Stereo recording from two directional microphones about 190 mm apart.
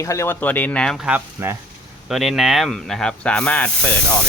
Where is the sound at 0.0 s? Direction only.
15° left (ahead or behind).